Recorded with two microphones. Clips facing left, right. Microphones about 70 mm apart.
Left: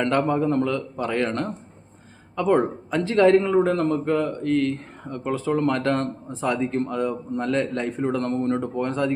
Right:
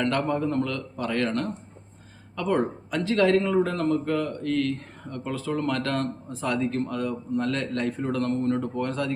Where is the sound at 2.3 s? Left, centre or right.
Left.